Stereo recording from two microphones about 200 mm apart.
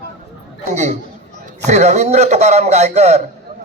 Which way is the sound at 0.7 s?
35° right (ahead or behind).